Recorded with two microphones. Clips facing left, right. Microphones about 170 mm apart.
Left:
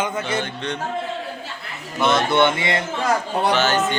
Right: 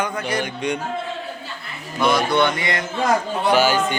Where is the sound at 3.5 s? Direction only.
10° right (ahead or behind).